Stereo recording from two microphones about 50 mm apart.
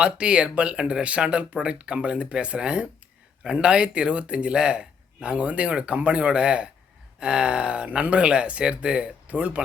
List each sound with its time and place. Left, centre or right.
0.0 s speech: right